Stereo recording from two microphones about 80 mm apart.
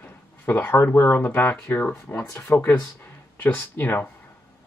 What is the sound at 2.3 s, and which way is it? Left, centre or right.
Speech, left.